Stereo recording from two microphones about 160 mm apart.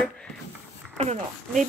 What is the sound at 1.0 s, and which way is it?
Speech, 45° right (ahead or behind).